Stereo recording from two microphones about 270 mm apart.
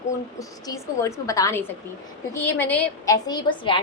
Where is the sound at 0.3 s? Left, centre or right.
Centre.